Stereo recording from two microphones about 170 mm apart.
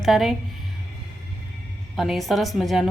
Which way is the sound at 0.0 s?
Centre (ahead or behind).